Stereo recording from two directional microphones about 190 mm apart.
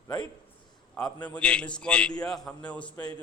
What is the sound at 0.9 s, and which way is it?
A man's voice, 5° left (ahead or behind).